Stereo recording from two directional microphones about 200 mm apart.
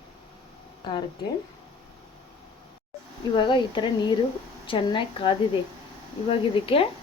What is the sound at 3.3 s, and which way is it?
Speech, 25° left (ahead or behind).